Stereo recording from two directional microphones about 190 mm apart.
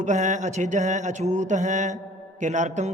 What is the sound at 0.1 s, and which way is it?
Speech, 40° right (ahead or behind).